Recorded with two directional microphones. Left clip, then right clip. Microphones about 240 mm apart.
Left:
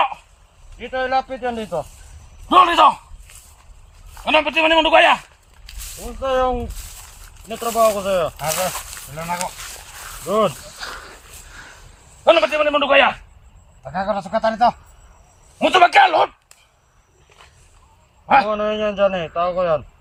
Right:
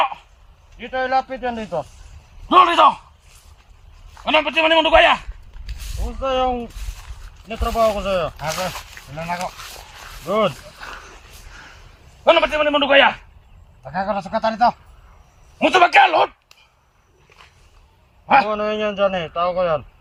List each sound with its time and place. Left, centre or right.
0.8 s a man's voice: centre
2.5 s a man's voice: centre
4.1 s a man's voice: left
5.6 s a sound: left
6.0 s a man's voice: centre
9.9 s a sound: centre
10.2 s a man's voice: centre
10.6 s a sound: left
12.2 s a man's voice: centre
18.3 s a man's voice: centre